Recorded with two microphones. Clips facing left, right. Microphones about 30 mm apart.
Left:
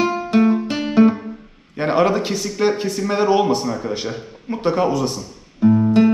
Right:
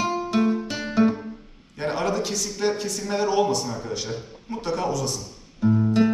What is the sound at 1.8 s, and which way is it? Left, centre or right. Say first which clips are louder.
Speech: left 8 dB; left.